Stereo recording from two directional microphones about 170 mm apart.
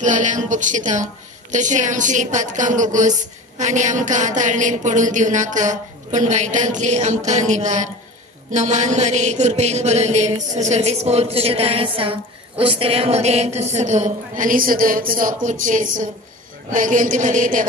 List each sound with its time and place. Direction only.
0.0 s mantra: 45° right (ahead or behind)